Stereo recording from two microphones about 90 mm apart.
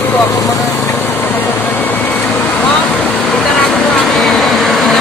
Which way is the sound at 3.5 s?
5° left (ahead or behind).